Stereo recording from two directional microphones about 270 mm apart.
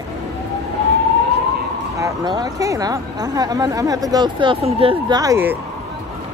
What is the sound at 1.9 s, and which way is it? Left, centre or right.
Speech, centre.